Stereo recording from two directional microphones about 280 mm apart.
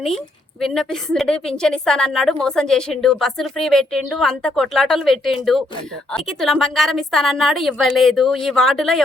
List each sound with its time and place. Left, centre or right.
0.6 s a woman's voice: centre